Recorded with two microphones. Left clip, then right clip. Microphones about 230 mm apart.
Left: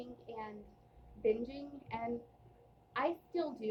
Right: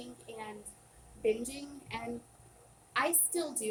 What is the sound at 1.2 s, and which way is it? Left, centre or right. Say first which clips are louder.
A woman's voice: right 2 dB; centre.